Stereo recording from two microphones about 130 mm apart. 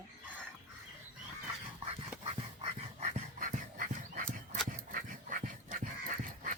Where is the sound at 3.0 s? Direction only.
75° right (ahead or behind).